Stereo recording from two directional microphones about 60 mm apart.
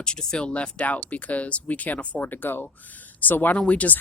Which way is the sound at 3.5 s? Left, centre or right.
Left.